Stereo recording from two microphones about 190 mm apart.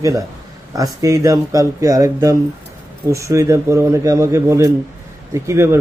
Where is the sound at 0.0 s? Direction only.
15° right (ahead or behind).